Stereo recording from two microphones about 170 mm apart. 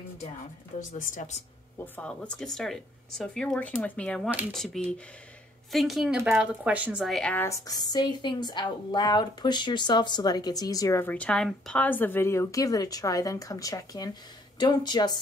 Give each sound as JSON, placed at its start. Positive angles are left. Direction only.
{"t": 0.7, "sound": "speech", "side_deg": 50}
{"t": 2.0, "sound": "speech", "side_deg": 5}
{"t": 7.4, "sound": "a woman's voice", "side_deg": 20}